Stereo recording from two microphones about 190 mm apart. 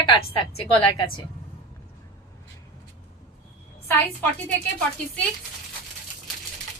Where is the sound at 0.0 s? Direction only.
25° left (ahead or behind).